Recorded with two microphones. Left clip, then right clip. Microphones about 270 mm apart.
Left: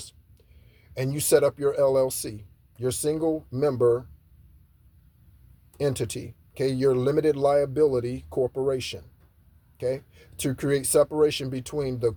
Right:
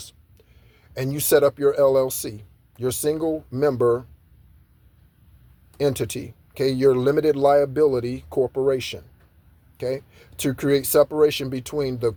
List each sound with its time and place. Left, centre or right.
0.9 s speech: right
5.7 s speech: right